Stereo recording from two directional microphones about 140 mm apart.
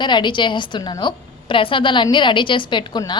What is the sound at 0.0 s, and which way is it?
A woman's voice, 35° left (ahead or behind).